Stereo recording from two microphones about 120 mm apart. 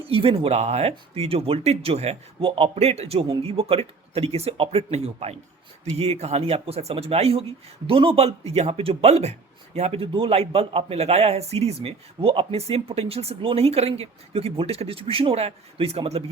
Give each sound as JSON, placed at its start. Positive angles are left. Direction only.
{"t": 0.0, "sound": "a man's voice", "side_deg": -50}